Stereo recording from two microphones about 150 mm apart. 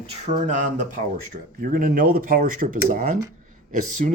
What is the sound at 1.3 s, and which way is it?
Speech, 75° right (ahead or behind).